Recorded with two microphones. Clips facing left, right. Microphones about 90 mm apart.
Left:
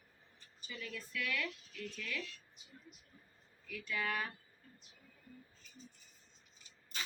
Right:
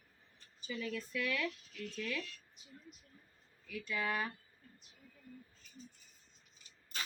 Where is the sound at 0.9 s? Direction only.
25° right (ahead or behind).